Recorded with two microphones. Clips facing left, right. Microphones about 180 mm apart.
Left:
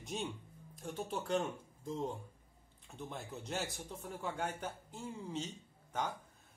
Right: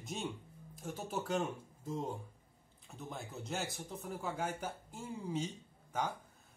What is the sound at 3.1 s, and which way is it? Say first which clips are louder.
Speech: even; centre (ahead or behind).